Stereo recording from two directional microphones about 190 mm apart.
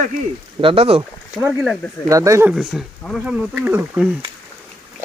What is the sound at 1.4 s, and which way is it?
Speech, 5° right (ahead or behind).